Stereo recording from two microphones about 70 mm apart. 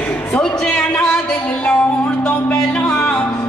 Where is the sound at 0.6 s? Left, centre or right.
Centre.